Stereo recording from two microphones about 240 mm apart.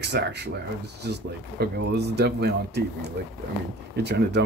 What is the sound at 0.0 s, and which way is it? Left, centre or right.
Speech, right.